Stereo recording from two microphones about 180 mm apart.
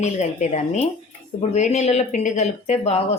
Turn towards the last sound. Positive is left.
turn(degrees=35)  # may be behind; listen again after turning